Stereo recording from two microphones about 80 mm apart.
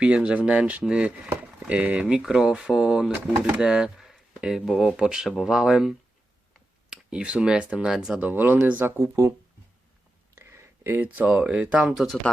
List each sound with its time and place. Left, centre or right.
0.0 s speech: centre
8.2 s speech: right
10.3 s a sound: right
11.0 s speech: centre